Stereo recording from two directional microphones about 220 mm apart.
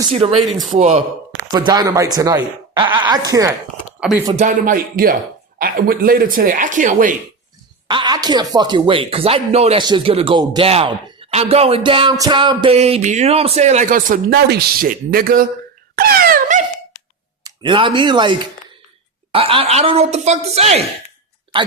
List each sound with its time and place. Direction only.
0.1 s speech: 25° right (ahead or behind)
0.4 s speech: centre (ahead or behind)
0.7 s speech: 30° right (ahead or behind)
1.5 s speech: 20° right (ahead or behind)
4.4 s speech: 35° right (ahead or behind)
7.9 s speech: 20° right (ahead or behind); by 15.4 s 40° right (ahead or behind)
16.0 s wail: 45° right (ahead or behind)
17.4 s speech: 20° right (ahead or behind)